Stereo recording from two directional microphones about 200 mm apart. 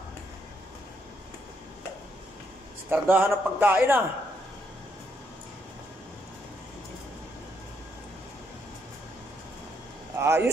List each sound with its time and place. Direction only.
2.9 s a man's voice: 10° right (ahead or behind)
10.1 s speech: 10° right (ahead or behind)